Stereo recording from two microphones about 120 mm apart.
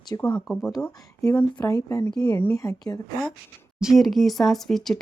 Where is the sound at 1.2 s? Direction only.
20° left (ahead or behind).